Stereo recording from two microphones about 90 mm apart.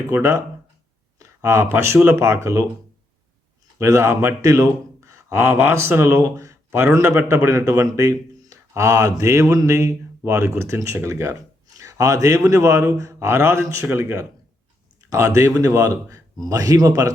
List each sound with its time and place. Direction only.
0.1 s speech: 35° right (ahead or behind)
3.8 s a man's voice: 35° right (ahead or behind)
6.1 s a man's voice: 40° right (ahead or behind)